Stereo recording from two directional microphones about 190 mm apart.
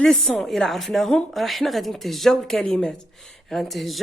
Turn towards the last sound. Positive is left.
turn(degrees=0)  # may be behind; listen again after turning